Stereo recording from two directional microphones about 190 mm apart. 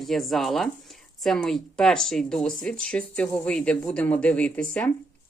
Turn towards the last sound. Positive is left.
turn(degrees=5)  # may be behind; listen again after turning